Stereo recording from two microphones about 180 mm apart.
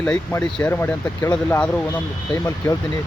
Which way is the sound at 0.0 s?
10° left (ahead or behind).